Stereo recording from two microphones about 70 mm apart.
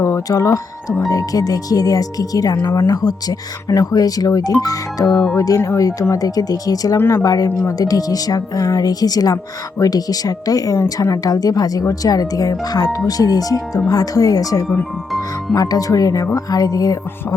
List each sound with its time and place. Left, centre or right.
0.3 s speech: left
6.9 s speech: left